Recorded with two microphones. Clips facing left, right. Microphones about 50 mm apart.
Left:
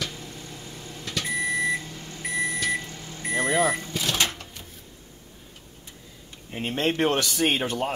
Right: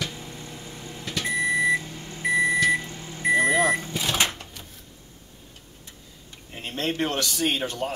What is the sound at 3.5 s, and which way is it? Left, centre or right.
Vehicle, centre.